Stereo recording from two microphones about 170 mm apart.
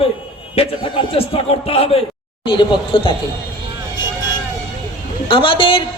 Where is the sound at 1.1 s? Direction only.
35° left (ahead or behind).